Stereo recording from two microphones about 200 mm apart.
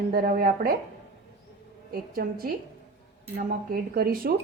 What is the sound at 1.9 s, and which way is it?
Speech, 45° right (ahead or behind).